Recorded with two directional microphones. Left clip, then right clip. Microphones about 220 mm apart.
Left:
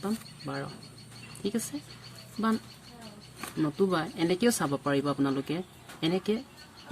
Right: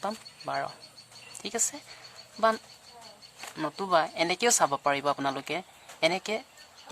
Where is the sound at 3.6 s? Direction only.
45° right (ahead or behind).